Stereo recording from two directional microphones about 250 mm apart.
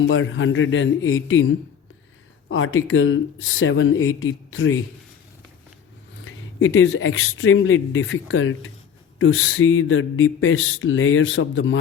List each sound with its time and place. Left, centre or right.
0.0 s speech: left
6.2 s speech: left